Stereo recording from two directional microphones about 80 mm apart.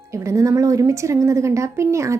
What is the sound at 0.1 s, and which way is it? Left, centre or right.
Speech, right.